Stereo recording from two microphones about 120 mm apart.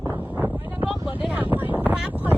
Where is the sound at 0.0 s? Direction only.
30° right (ahead or behind).